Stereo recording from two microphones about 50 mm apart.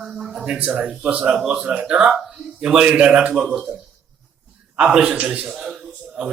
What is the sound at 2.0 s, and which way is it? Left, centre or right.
A man's voice, centre.